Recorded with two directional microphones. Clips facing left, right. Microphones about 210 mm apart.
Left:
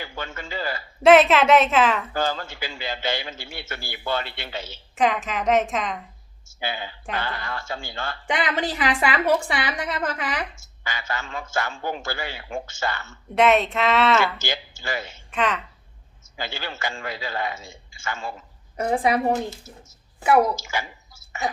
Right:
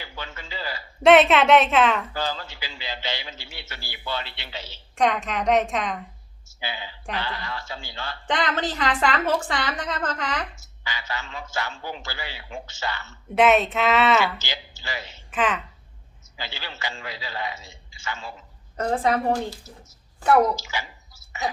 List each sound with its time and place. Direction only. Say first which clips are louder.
0.0 s a sound: left 4 dB; 50° left (ahead or behind)
1.0 s a woman's voice: left 1 dB; centre (ahead or behind)
2.1 s a man's voice: left 4 dB; 50° left (ahead or behind)
4.9 s a woman's voice: even; 5° left (ahead or behind)
6.6 s a man's voice: left 4 dB; 50° left (ahead or behind)
8.3 s a woman's voice: even; 10° left (ahead or behind)
10.8 s a man's voice: left 2 dB; 50° left (ahead or behind)
13.3 s a woman's voice: even; centre (ahead or behind)
14.3 s a man's voice: left 5 dB; 50° left (ahead or behind)
15.3 s a woman's voice: even; centre (ahead or behind)
16.4 s a man's voice: left 4 dB; 50° left (ahead or behind)
18.9 s a woman's voice: left 1 dB; 15° left (ahead or behind)
20.6 s a man's voice: left 3 dB; 50° left (ahead or behind)